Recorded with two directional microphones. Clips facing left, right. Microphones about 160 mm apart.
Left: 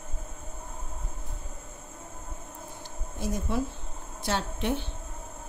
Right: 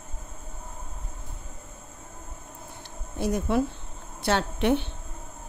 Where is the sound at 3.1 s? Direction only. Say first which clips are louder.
Right 6 dB; 65° right (ahead or behind).